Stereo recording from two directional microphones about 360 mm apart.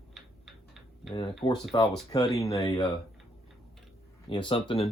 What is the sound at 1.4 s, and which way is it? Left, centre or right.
Speech, centre.